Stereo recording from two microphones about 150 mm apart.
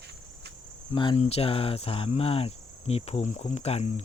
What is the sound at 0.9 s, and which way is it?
Cricket, 35° left (ahead or behind).